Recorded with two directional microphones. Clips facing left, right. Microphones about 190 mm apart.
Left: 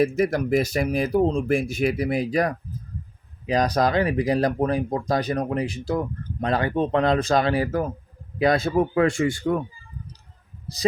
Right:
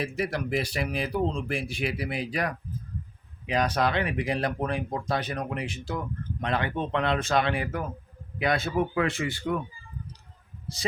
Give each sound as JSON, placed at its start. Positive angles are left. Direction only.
{"t": 0.0, "sound": "speech", "side_deg": 45}